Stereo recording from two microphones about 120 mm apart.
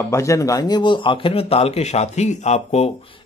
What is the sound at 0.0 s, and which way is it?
A man's voice, 25° left (ahead or behind).